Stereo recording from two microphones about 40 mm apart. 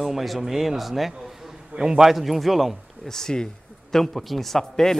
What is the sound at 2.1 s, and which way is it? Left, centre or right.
Speech, centre.